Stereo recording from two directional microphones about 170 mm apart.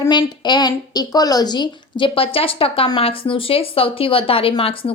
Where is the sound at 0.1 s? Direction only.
25° left (ahead or behind).